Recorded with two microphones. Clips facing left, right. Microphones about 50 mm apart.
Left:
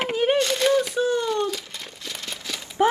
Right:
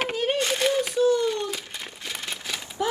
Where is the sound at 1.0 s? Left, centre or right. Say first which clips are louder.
Right 1 dB; left.